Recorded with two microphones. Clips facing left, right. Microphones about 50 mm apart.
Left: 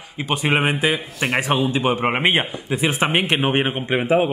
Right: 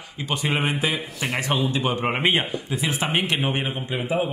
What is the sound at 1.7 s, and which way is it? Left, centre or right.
Speech, centre.